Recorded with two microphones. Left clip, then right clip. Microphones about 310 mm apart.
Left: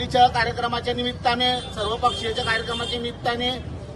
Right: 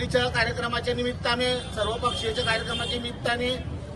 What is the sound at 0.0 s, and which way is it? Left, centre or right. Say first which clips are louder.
A man's voice: left 6 dB; centre.